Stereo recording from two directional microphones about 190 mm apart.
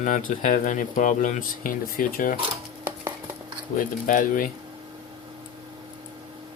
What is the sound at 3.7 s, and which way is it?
Speech, 45° left (ahead or behind).